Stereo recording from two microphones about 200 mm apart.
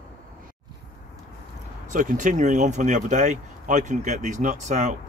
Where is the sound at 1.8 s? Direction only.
40° right (ahead or behind).